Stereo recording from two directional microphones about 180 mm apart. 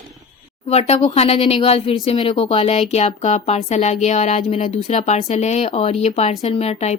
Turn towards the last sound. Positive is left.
turn(degrees=35)  # may be behind; listen again after turning